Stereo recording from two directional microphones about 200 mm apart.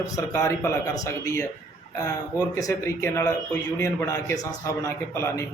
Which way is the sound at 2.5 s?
15° left (ahead or behind).